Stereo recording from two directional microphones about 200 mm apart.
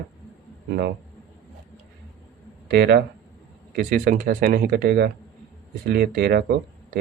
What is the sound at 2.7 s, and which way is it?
Speech, 55° right (ahead or behind).